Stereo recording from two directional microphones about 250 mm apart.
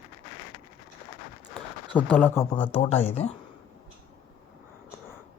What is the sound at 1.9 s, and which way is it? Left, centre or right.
Speech, centre.